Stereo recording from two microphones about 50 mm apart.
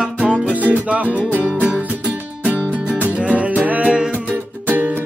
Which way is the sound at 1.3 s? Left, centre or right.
Right.